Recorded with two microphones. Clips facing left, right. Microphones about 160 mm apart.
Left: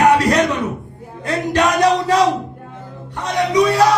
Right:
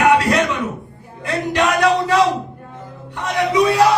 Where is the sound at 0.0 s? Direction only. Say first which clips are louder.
Left 1 dB; 40° left (ahead or behind).